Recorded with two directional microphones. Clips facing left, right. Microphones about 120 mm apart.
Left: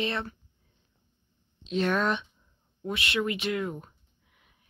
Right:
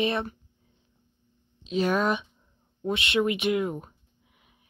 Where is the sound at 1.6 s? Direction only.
5° right (ahead or behind).